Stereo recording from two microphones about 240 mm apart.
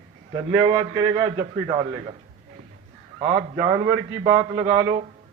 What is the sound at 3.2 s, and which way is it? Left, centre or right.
A man's voice, right.